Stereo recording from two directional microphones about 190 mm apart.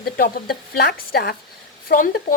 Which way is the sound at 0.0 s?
50° left (ahead or behind).